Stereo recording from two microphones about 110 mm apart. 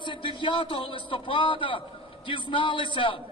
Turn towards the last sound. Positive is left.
turn(degrees=50)  # may be behind; listen again after turning